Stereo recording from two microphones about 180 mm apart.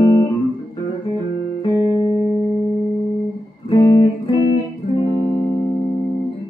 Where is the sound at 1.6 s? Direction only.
25° left (ahead or behind).